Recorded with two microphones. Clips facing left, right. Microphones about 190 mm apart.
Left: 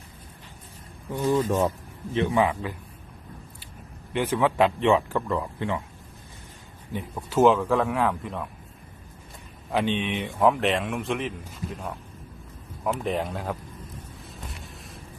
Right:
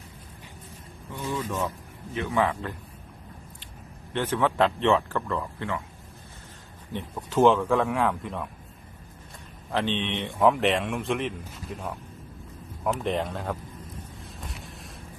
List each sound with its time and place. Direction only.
1.2 s speech: 40° left (ahead or behind)
2.3 s speech: 15° left (ahead or behind)
4.1 s speech: 10° left (ahead or behind)
6.9 s speech: 5° left (ahead or behind)
9.7 s speech: 10° left (ahead or behind)
14.3 s a sound: centre (ahead or behind)